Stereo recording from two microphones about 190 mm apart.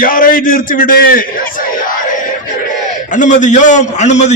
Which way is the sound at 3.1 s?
40° left (ahead or behind).